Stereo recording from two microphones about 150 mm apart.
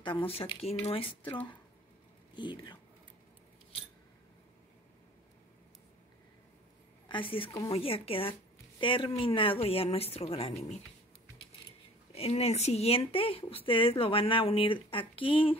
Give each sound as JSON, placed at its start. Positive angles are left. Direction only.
{"t": 0.0, "sound": "speech", "side_deg": 35}
{"t": 7.1, "sound": "speech", "side_deg": 35}
{"t": 12.1, "sound": "speech", "side_deg": 45}